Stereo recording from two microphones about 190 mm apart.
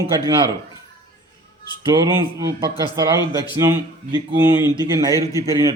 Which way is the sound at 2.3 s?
15° right (ahead or behind).